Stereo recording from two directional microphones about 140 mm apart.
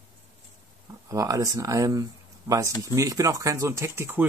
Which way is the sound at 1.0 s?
25° right (ahead or behind).